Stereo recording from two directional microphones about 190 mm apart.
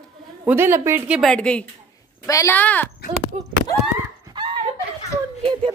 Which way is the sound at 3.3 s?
35° right (ahead or behind).